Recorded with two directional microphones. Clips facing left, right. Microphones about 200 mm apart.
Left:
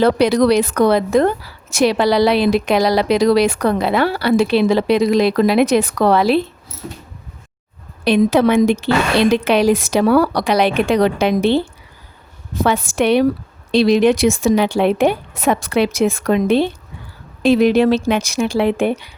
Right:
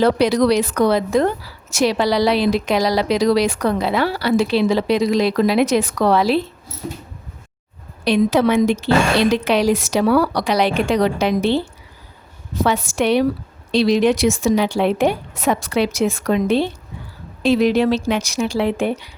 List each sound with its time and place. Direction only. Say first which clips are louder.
0.0 s speech: left 2 dB; 60° left (ahead or behind)
8.0 s speech: left 2 dB; 55° left (ahead or behind)
12.6 s speech: left 2 dB; 55° left (ahead or behind)